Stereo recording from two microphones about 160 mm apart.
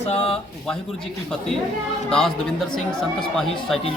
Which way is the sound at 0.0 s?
40° left (ahead or behind).